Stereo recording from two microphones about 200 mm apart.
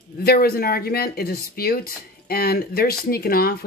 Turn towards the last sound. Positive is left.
turn(degrees=50)  # may be behind; listen again after turning